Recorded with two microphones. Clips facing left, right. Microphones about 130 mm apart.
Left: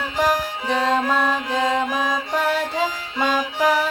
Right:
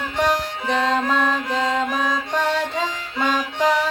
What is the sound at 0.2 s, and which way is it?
Music, 10° left (ahead or behind).